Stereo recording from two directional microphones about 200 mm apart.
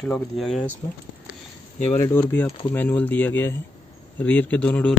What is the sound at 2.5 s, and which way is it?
Speech, 25° left (ahead or behind).